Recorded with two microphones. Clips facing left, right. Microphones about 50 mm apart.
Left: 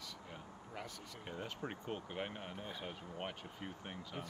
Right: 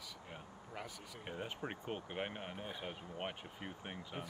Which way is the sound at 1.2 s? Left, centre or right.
Centre.